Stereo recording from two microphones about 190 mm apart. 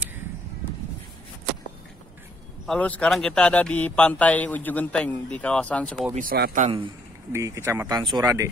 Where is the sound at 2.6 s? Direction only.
5° left (ahead or behind).